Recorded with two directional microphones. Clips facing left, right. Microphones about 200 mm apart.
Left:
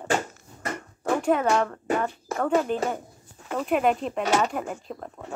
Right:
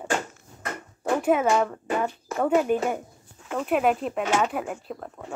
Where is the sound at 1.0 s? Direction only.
5° right (ahead or behind).